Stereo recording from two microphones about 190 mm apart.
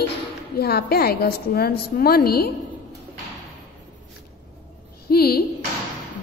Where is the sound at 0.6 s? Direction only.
55° left (ahead or behind).